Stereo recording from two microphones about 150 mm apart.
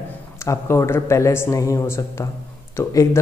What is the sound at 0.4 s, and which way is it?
Speech, 20° left (ahead or behind).